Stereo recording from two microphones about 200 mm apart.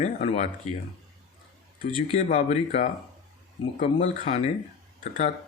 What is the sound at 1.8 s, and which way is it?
Speech, 35° left (ahead or behind).